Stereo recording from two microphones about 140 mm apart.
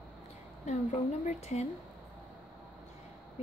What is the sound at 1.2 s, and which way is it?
Speech, 50° left (ahead or behind).